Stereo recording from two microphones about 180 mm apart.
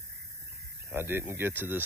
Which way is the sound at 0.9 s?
10° right (ahead or behind).